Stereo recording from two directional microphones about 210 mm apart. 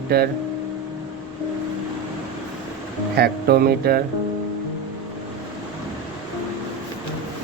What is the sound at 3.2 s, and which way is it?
Speech, 45° right (ahead or behind).